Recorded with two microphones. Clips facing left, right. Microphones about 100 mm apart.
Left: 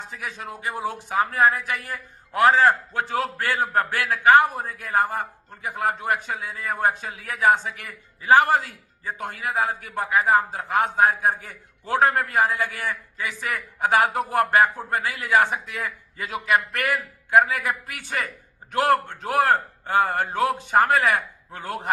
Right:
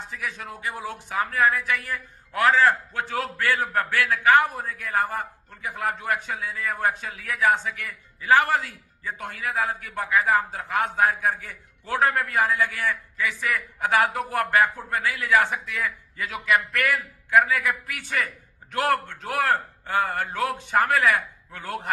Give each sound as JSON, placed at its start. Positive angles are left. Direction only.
{"t": 0.1, "sound": "a man's voice", "side_deg": 25}
{"t": 8.6, "sound": "a man's voice", "side_deg": 35}
{"t": 12.4, "sound": "a man's voice", "side_deg": 40}
{"t": 12.7, "sound": "a man's voice", "side_deg": 25}